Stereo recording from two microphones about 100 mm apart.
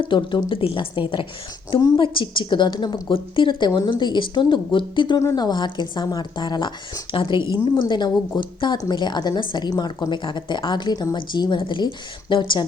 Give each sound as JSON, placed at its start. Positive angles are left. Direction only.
{"t": 0.0, "sound": "a woman's voice", "side_deg": 55}
{"t": 0.6, "sound": "a woman's voice", "side_deg": 65}
{"t": 5.2, "sound": "a woman's voice", "side_deg": 40}